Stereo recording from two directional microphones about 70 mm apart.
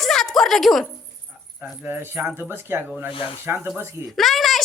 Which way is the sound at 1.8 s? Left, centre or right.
Right.